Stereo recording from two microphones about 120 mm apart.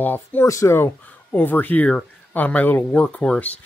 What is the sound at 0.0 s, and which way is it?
Speech, 15° left (ahead or behind).